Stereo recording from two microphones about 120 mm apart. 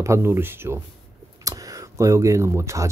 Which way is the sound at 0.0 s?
25° right (ahead or behind).